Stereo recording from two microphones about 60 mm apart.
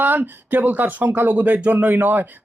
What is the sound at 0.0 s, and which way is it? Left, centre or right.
Speech, right.